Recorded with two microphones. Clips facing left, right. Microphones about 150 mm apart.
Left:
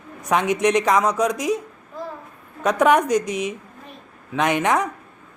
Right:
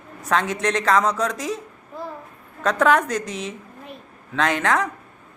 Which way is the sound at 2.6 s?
15° left (ahead or behind).